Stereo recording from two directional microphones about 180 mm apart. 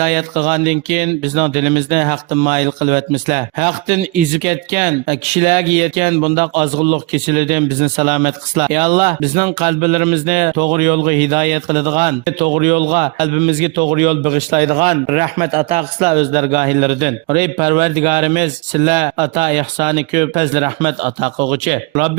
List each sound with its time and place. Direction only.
0.0 s speech: 45° right (ahead or behind)